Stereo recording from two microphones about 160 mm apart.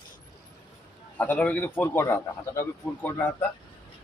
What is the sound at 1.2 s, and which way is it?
Speech, 10° left (ahead or behind).